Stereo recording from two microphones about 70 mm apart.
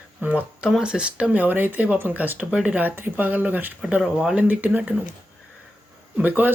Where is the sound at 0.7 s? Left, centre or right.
Centre.